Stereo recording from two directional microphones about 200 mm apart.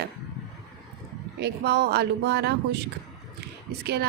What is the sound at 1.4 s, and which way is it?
Speech, 55° right (ahead or behind).